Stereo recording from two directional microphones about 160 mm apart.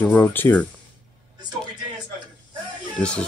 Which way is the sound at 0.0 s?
10° left (ahead or behind).